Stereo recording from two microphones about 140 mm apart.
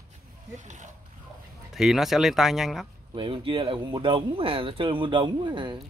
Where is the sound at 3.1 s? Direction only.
40° right (ahead or behind).